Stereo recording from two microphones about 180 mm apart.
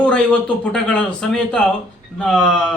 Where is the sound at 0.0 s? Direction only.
5° left (ahead or behind).